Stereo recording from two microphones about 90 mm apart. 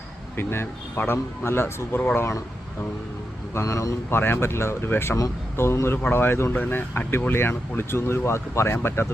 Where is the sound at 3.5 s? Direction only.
35° left (ahead or behind).